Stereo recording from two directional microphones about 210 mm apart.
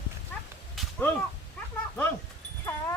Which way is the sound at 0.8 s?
Centre (ahead or behind).